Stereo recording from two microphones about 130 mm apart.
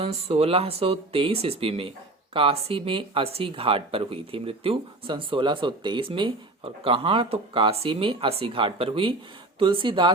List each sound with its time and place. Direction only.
0.0 s speech: 50° right (ahead or behind)